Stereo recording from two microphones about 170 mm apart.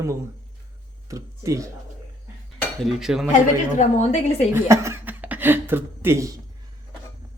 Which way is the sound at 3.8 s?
40° left (ahead or behind).